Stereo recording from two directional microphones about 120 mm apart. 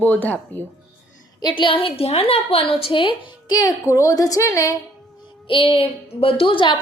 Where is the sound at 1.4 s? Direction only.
40° left (ahead or behind).